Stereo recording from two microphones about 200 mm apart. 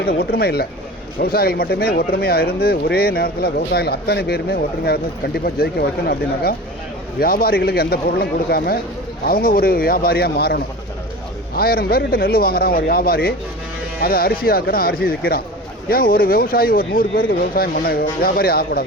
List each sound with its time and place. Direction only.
0.0 s speech: 50° left (ahead or behind)